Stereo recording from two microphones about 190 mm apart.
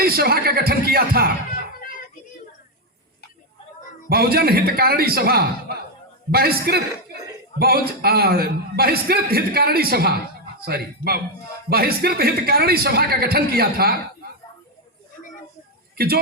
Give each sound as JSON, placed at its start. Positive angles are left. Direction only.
{"t": 0.0, "sound": "a man's voice", "side_deg": -55}
{"t": 4.1, "sound": "a man's voice", "side_deg": -55}
{"t": 16.0, "sound": "a man's voice", "side_deg": -55}